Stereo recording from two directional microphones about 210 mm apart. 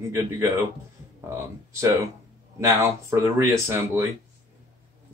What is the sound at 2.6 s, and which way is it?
Speech, 10° right (ahead or behind).